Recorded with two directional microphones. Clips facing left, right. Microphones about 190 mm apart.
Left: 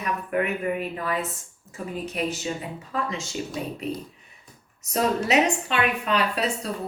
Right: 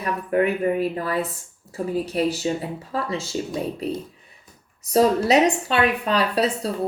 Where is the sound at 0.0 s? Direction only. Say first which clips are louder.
Right 5 dB; 35° right (ahead or behind).